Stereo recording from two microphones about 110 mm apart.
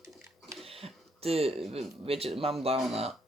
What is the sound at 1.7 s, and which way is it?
Speech, 65° right (ahead or behind).